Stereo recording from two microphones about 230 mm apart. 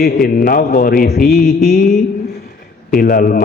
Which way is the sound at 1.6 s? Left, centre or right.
Left.